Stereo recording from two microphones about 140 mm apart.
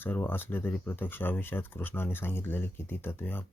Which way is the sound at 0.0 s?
15° left (ahead or behind).